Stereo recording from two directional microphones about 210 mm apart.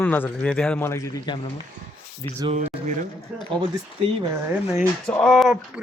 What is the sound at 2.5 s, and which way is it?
Speech, 35° right (ahead or behind).